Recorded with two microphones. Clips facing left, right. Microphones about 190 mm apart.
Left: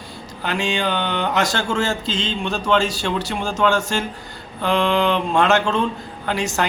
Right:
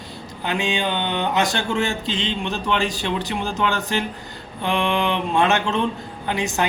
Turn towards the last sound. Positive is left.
turn(degrees=-20)  # may be behind; listen again after turning